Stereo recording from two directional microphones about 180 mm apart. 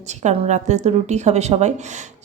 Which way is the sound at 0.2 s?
40° right (ahead or behind).